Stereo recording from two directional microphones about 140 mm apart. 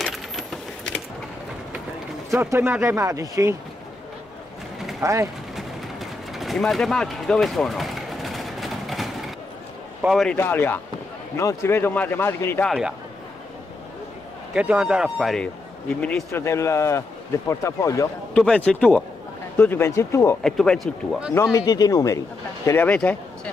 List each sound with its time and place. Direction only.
0.0 s coin: centre (ahead or behind)
2.5 s speech: 15° right (ahead or behind)
5.0 s speech: 20° right (ahead or behind)
5.6 s a sound: centre (ahead or behind)
10.0 s speech: centre (ahead or behind)
10.3 s speech: 15° left (ahead or behind)
12.6 s speech: centre (ahead or behind)
14.5 s speech: 10° right (ahead or behind); by 16.3 s 10° left (ahead or behind)
16.3 s a man's voice: 20° left (ahead or behind)
18.3 s a man's voice: 5° left (ahead or behind)
20.4 s speech: 5° left (ahead or behind)
21.4 s a man's voice: 20° left (ahead or behind)
22.7 s speech: 10° left (ahead or behind)